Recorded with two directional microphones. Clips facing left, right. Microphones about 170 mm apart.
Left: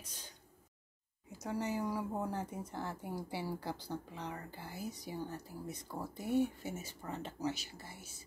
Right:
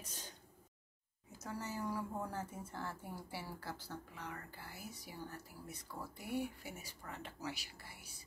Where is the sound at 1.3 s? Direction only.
15° left (ahead or behind).